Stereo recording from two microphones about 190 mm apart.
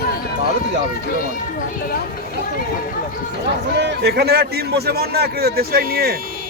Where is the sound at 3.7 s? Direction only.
60° right (ahead or behind).